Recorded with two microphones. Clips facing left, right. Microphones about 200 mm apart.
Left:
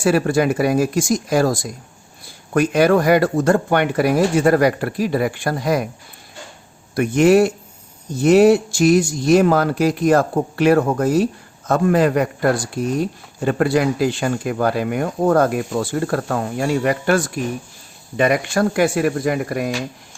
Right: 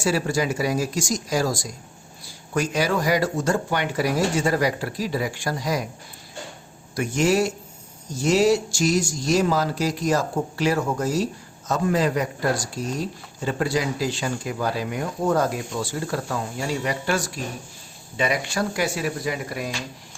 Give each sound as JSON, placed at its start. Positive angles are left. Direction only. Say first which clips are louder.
{"t": 0.0, "sound": "speech", "louder": "left 7 dB", "side_deg": 55}
{"t": 6.9, "sound": "speech", "louder": "left 8 dB", "side_deg": 60}